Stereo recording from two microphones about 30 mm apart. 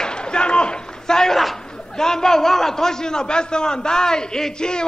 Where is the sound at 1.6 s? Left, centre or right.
Left.